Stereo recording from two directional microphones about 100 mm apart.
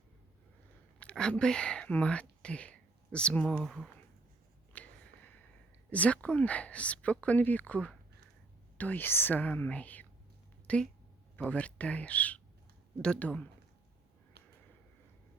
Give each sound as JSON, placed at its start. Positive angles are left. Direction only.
{"t": 0.9, "sound": "speech", "side_deg": 10}
{"t": 4.7, "sound": "a sound", "side_deg": 15}
{"t": 5.9, "sound": "speech", "side_deg": 15}